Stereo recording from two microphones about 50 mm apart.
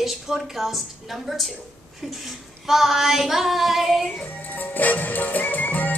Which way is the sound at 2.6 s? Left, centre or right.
Centre.